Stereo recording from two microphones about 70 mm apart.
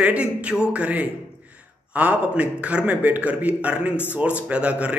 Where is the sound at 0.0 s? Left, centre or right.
Centre.